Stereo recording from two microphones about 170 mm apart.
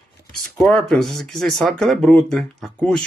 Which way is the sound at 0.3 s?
Centre (ahead or behind).